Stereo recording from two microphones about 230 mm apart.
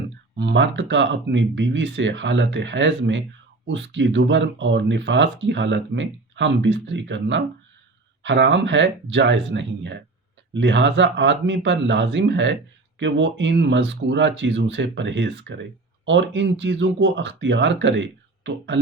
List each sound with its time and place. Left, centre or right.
0.3 s speech: right